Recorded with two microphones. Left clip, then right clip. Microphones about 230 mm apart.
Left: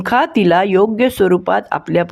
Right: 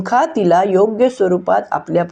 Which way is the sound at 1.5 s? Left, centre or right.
Left.